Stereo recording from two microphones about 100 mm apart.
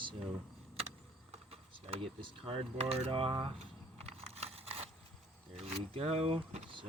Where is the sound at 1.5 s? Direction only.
75° right (ahead or behind).